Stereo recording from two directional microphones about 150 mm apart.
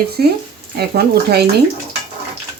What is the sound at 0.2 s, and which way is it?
A woman's voice, 90° right.